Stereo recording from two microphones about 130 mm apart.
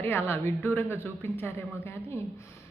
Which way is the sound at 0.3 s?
15° left (ahead or behind).